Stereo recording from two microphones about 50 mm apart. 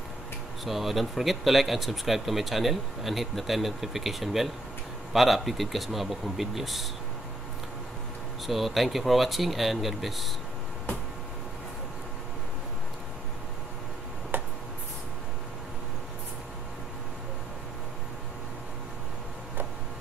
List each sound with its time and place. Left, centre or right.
0.7 s speech: centre
8.5 s speech: centre
14.3 s a sound: right